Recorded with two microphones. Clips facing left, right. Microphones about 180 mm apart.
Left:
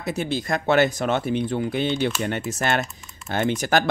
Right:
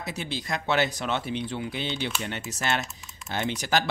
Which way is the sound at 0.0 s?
50° left (ahead or behind).